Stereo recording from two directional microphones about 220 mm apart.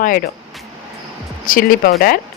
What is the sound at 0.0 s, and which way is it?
Speech, 40° left (ahead or behind).